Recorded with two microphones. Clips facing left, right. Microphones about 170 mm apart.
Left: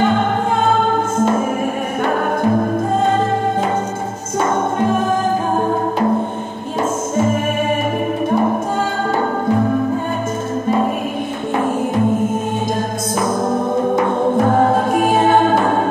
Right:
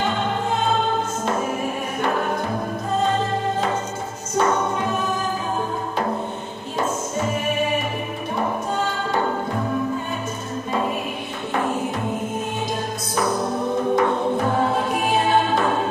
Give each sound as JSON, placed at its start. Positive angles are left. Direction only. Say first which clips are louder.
{"t": 0.0, "sound": "music", "louder": "left 7 dB", "side_deg": 50}
{"t": 2.6, "sound": "music", "louder": "left 6 dB", "side_deg": 50}
{"t": 4.5, "sound": "music", "louder": "left 5 dB", "side_deg": 50}
{"t": 13.2, "sound": "music", "louder": "left 4 dB", "side_deg": 50}